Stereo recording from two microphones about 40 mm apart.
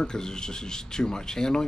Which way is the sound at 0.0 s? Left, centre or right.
Centre.